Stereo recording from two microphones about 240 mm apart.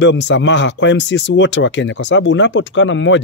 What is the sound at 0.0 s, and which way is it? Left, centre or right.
Speech, left.